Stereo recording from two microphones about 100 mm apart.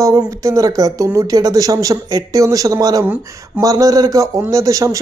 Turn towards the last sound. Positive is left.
turn(degrees=-35)  # may be behind; listen again after turning